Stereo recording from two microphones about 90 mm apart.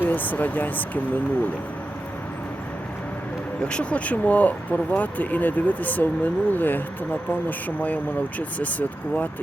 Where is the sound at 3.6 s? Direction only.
10° left (ahead or behind).